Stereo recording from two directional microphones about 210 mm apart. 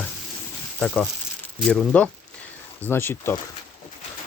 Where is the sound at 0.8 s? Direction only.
Centre (ahead or behind).